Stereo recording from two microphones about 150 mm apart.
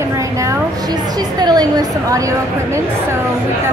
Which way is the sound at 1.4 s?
25° right (ahead or behind).